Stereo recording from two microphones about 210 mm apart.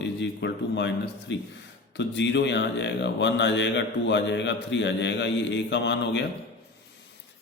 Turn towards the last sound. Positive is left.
turn(degrees=55)  # may be behind; listen again after turning